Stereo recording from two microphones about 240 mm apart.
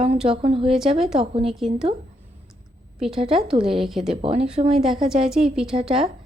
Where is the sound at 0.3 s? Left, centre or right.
Right.